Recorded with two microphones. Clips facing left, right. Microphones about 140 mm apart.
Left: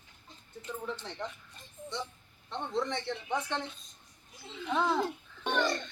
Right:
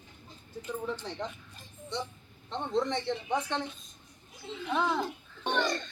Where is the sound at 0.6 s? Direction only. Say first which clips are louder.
Right 3 dB; 15° right (ahead or behind).